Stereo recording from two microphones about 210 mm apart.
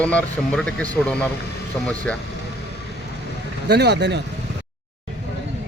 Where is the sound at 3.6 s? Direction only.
50° right (ahead or behind).